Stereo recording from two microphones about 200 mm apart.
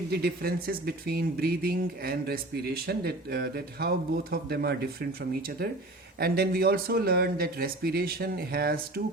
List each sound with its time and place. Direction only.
0.1 s speech: 50° right (ahead or behind)
6.1 s speech: 50° right (ahead or behind)